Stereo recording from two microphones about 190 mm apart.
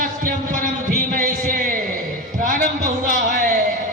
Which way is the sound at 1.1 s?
50° right (ahead or behind).